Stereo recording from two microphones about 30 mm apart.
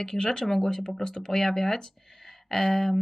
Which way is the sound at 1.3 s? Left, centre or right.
Centre.